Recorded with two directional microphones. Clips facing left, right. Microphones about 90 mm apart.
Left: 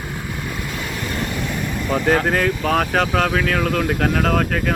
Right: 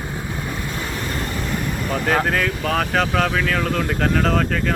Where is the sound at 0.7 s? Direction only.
35° right (ahead or behind).